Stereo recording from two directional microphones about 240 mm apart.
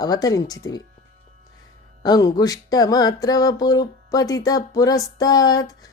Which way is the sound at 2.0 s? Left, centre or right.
Centre.